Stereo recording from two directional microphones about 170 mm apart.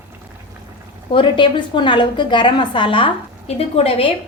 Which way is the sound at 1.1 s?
30° left (ahead or behind).